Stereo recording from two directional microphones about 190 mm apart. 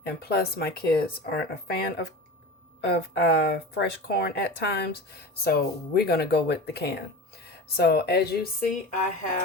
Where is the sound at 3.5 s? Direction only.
60° left (ahead or behind).